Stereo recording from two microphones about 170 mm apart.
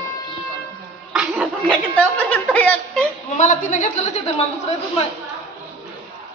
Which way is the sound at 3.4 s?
45° left (ahead or behind).